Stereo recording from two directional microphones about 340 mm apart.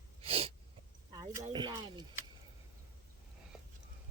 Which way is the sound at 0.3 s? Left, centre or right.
Centre.